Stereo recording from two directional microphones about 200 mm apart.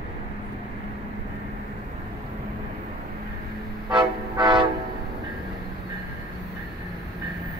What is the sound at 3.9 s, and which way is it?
Vehicle, 20° right (ahead or behind).